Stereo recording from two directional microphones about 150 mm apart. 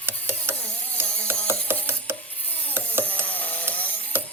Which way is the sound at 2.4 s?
10° left (ahead or behind).